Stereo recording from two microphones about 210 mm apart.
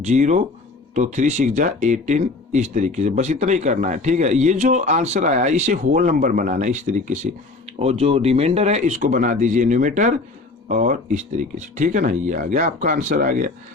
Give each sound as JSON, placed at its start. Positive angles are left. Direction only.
{"t": 0.0, "sound": "speech", "side_deg": -35}